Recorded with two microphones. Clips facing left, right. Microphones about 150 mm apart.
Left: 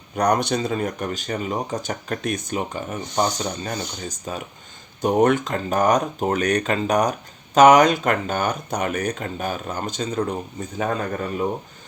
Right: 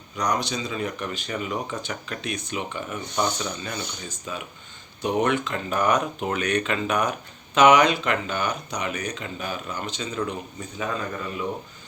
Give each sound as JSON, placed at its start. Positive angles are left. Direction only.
{"t": 0.2, "sound": "speech", "side_deg": 55}